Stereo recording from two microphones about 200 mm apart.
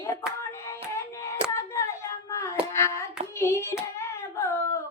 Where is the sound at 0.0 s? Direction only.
15° left (ahead or behind).